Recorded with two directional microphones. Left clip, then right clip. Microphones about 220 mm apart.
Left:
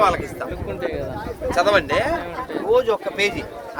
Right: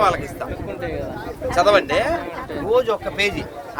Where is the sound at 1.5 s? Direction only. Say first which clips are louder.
Right 2 dB; centre (ahead or behind).